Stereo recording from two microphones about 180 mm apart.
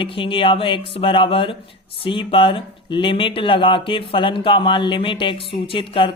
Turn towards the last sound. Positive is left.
turn(degrees=30)  # may be behind; listen again after turning